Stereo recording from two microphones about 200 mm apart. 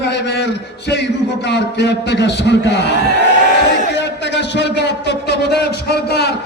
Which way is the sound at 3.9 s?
60° left (ahead or behind).